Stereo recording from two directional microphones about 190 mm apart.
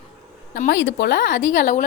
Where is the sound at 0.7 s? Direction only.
65° left (ahead or behind).